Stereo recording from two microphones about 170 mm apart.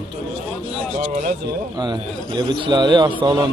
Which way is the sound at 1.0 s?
45° right (ahead or behind).